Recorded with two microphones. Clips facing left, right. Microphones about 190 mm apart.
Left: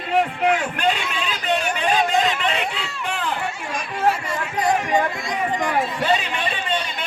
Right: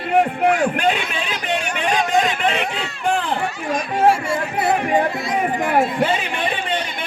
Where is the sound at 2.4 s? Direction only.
55° right (ahead or behind).